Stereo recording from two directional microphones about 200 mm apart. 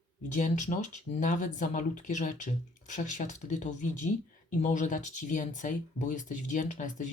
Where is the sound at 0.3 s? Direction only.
40° left (ahead or behind).